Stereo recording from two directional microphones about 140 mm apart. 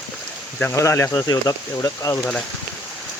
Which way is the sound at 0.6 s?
20° left (ahead or behind).